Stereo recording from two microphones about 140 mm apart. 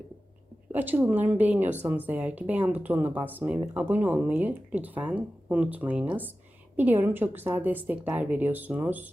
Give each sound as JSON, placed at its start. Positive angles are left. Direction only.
{"t": 0.7, "sound": "speech", "side_deg": -15}